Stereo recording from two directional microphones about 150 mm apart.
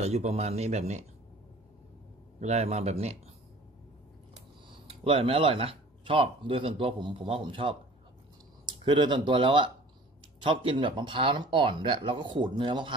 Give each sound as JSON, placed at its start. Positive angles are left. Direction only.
{"t": 0.0, "sound": "speech", "side_deg": -45}
{"t": 2.4, "sound": "speech", "side_deg": -45}
{"t": 4.6, "sound": "speech", "side_deg": -35}